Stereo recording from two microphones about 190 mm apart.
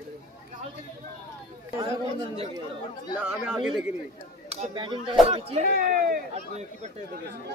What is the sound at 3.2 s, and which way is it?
Speech, 5° right (ahead or behind).